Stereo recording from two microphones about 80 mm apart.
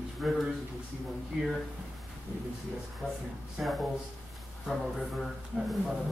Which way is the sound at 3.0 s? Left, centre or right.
Centre.